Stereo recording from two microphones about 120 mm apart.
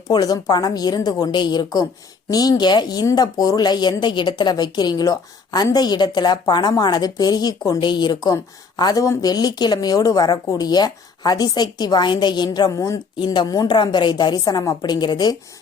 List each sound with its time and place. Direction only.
0.1 s speech: 35° left (ahead or behind)
13.1 s speech: 40° left (ahead or behind)